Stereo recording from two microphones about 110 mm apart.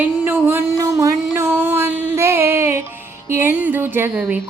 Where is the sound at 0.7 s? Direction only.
30° right (ahead or behind).